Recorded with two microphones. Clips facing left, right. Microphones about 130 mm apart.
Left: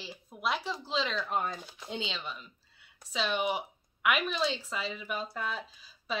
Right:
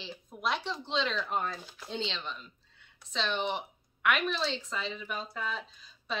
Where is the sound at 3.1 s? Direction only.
10° left (ahead or behind).